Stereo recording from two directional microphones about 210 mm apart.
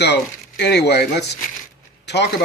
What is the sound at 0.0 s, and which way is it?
Speech, 50° left (ahead or behind).